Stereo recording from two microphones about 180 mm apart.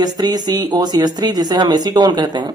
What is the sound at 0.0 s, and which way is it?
Speech, 20° right (ahead or behind).